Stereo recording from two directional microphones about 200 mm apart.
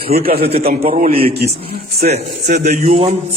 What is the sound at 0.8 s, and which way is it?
Speech, 30° right (ahead or behind).